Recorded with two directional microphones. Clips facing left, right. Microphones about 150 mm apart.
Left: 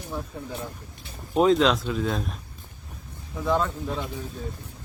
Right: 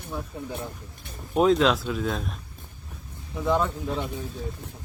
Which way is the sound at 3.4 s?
20° right (ahead or behind).